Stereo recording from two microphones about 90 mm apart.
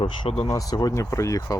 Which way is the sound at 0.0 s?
85° left.